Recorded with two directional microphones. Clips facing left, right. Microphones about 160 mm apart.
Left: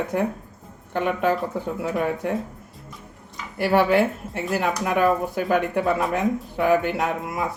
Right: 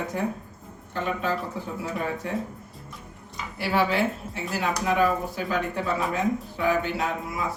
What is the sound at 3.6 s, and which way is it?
Speech, 55° left (ahead or behind).